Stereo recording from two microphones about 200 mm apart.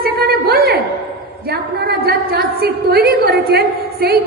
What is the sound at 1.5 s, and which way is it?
A woman's voice, 50° right (ahead or behind).